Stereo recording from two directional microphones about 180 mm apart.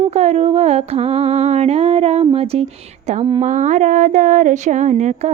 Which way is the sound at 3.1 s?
40° right (ahead or behind).